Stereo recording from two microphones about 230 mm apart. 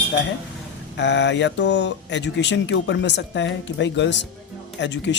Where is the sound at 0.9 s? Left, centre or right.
Left.